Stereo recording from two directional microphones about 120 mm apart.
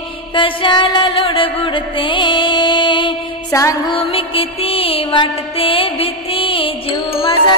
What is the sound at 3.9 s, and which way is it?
Music, 50° left (ahead or behind).